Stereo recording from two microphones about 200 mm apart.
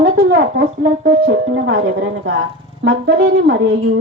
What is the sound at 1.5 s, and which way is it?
Speech, 75° right (ahead or behind).